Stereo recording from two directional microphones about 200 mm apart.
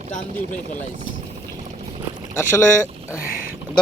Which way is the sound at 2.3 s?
10° left (ahead or behind).